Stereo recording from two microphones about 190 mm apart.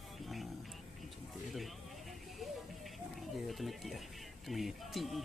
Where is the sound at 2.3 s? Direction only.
Centre (ahead or behind).